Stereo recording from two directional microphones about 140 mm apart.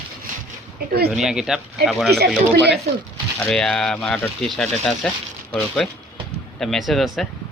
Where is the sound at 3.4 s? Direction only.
5° left (ahead or behind).